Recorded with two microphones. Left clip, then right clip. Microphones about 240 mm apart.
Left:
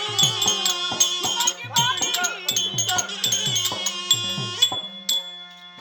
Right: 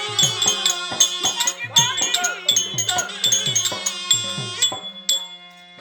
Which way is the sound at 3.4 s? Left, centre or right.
Left.